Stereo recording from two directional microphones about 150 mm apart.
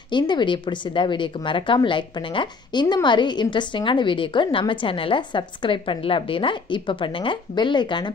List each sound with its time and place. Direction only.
0.1 s speech: 30° left (ahead or behind)